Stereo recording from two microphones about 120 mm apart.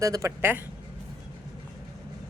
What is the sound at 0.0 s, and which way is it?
Speech, 25° right (ahead or behind).